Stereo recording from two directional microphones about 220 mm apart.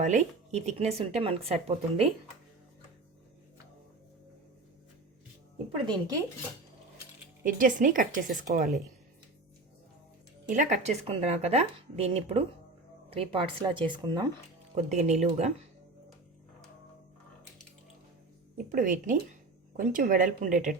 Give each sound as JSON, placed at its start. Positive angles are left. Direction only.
{"t": 0.0, "sound": "speech", "side_deg": -30}
{"t": 5.8, "sound": "speech", "side_deg": -20}
{"t": 7.4, "sound": "a woman's voice", "side_deg": -40}
{"t": 10.5, "sound": "speech", "side_deg": -35}
{"t": 14.8, "sound": "a woman's voice", "side_deg": -30}
{"t": 18.5, "sound": "speech", "side_deg": -40}